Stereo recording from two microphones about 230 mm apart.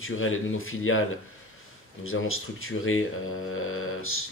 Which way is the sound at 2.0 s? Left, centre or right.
Left.